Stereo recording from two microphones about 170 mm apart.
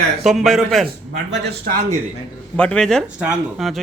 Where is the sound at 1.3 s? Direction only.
65° right (ahead or behind).